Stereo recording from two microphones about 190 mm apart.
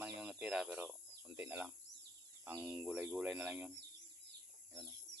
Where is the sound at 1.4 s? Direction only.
5° right (ahead or behind).